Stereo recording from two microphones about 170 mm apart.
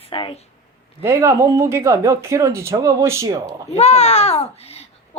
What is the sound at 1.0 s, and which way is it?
Speech, 15° right (ahead or behind).